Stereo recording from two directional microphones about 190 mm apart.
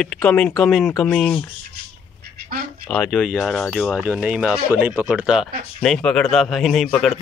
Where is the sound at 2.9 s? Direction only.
5° left (ahead or behind).